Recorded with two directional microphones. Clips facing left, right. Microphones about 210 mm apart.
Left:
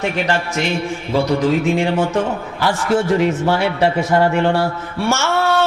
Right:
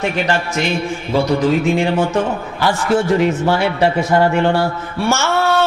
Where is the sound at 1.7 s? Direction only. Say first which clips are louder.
Right 1 dB; 15° right (ahead or behind).